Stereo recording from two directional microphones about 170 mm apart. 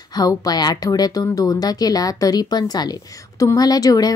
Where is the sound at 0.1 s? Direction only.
20° left (ahead or behind).